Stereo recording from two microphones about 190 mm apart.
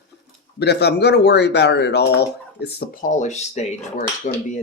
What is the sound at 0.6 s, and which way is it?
Speech, 60° left (ahead or behind).